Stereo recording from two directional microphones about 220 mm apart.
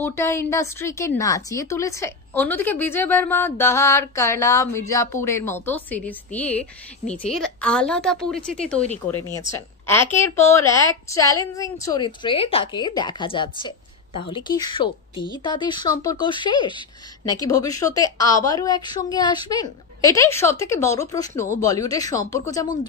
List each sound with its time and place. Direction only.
0.0 s a woman's voice: 10° left (ahead or behind)